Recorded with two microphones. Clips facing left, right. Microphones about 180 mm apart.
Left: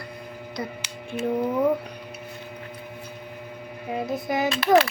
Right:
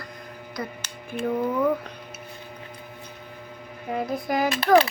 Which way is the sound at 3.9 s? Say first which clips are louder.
Even; 25° left (ahead or behind).